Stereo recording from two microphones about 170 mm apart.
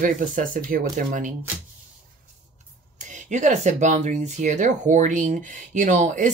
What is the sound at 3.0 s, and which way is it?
Speech, 45° right (ahead or behind).